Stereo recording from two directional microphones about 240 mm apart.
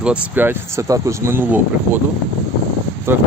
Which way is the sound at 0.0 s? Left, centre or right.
Centre.